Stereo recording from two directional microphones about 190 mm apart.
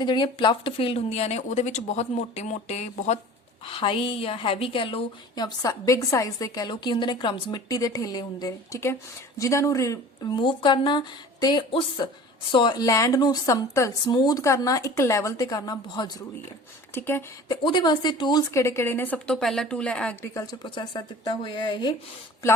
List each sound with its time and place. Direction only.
0.0 s a woman's voice: 25° left (ahead or behind)
16.9 s a woman's voice: 10° left (ahead or behind)
17.5 s a woman's voice: 25° left (ahead or behind); by 20.3 s 5° left (ahead or behind)
20.3 s a woman's voice: 20° left (ahead or behind)